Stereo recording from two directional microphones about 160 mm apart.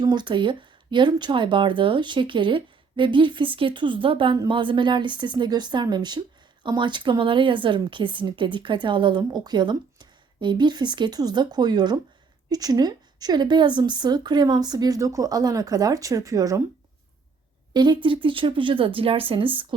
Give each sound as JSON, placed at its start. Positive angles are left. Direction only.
{"t": 0.0, "sound": "a woman's voice", "side_deg": -25}
{"t": 17.7, "sound": "speech", "side_deg": -30}